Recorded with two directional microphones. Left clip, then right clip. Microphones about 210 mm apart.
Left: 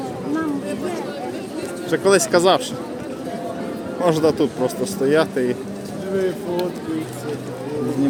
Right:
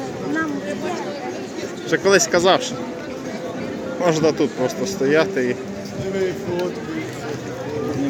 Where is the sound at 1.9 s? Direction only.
5° left (ahead or behind).